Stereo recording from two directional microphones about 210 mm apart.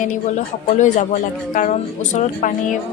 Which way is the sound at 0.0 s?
35° left (ahead or behind).